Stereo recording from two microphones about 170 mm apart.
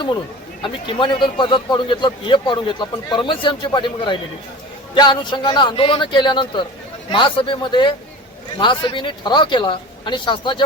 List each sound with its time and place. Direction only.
0.9 s a man's voice: 30° left (ahead or behind)